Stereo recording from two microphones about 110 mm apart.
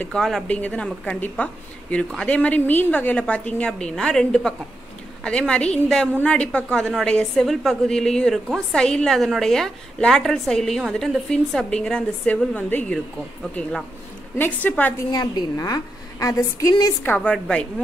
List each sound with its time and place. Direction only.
0.1 s a woman's voice: 5° left (ahead or behind)
13.6 s a woman's voice: 5° left (ahead or behind)
14.4 s a woman's voice: 15° left (ahead or behind)
15.0 s a woman's voice: 35° left (ahead or behind)
17.0 s a woman's voice: 15° left (ahead or behind)